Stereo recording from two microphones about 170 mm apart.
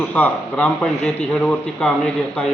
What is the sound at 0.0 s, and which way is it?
A man's voice, 5° left (ahead or behind).